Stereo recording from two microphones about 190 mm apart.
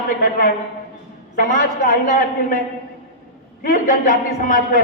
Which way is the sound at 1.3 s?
50° left (ahead or behind).